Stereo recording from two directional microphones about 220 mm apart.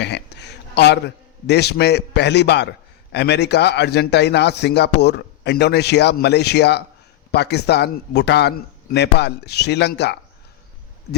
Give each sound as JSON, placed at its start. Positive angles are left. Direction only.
{"t": 0.0, "sound": "a man's voice", "side_deg": 50}